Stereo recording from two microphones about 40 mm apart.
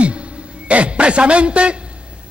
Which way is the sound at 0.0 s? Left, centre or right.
Right.